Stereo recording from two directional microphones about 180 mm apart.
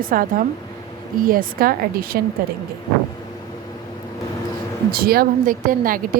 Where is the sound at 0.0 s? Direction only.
50° right (ahead or behind).